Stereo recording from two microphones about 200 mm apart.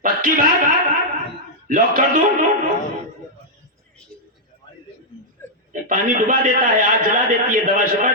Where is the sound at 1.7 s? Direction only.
45° right (ahead or behind).